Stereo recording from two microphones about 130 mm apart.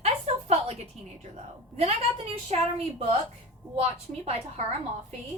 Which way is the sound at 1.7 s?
55° right (ahead or behind).